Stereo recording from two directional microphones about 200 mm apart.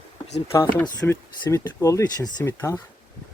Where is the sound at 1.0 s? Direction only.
15° left (ahead or behind).